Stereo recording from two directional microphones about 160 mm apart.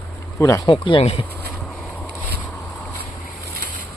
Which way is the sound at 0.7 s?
35° left (ahead or behind).